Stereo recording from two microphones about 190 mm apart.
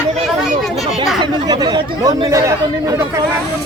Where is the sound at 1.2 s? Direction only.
20° right (ahead or behind).